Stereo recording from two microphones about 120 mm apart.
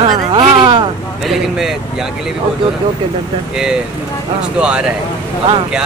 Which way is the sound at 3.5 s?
5° right (ahead or behind).